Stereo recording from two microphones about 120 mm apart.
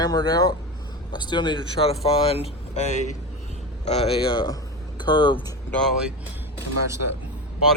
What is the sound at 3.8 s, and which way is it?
Mantra, 60° left (ahead or behind).